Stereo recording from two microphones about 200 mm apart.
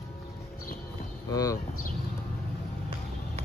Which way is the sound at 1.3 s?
15° left (ahead or behind).